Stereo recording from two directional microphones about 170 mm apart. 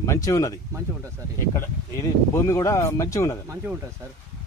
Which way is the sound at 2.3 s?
15° left (ahead or behind).